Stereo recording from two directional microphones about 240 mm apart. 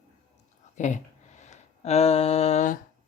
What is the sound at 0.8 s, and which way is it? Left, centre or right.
Speech, left.